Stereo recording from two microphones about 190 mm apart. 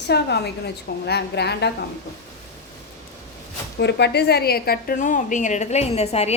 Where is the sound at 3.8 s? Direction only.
60° left (ahead or behind).